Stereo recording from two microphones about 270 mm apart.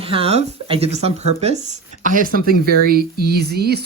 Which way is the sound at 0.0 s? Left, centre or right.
Right.